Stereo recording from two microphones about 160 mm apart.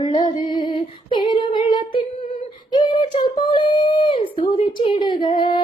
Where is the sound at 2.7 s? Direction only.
30° left (ahead or behind).